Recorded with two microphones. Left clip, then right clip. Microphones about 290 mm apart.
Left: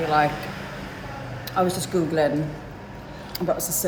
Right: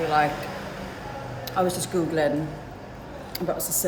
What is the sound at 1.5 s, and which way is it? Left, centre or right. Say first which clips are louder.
Speech: left 2 dB; centre.